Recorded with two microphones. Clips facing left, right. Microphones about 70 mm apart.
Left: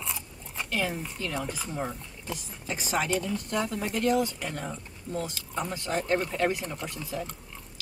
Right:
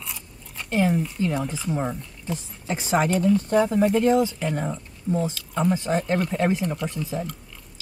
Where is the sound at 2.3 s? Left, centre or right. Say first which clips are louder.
Right 6 dB; right.